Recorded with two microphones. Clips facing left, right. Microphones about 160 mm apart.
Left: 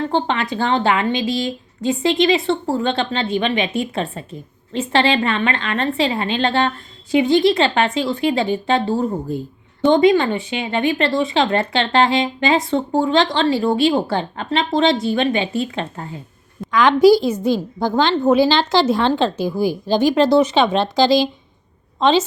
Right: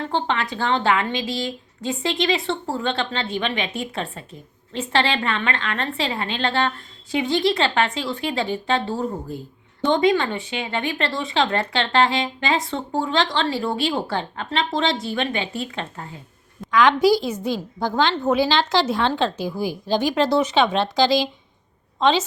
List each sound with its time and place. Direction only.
0.1 s a woman's voice: 15° left (ahead or behind)
16.7 s a woman's voice: 35° left (ahead or behind)